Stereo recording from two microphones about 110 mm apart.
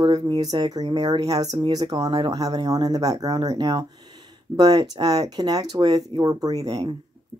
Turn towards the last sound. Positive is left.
turn(degrees=-40)  # may be behind; listen again after turning